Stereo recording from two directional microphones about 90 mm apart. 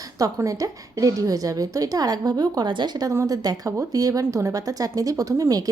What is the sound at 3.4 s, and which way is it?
A woman's voice, 45° right (ahead or behind).